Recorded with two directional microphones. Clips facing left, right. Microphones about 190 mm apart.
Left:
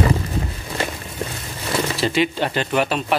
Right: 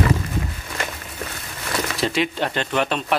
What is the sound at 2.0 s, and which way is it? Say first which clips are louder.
Speech: left 1 dB; centre (ahead or behind).